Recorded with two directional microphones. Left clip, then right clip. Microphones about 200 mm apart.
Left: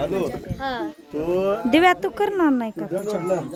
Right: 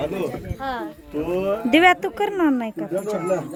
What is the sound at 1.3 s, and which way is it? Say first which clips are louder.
Speech: left 1 dB; 35° left (ahead or behind).